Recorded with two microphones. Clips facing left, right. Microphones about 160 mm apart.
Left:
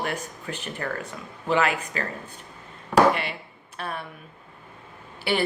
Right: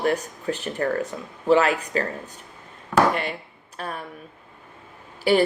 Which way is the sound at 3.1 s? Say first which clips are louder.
Right 2 dB; 45° right (ahead or behind).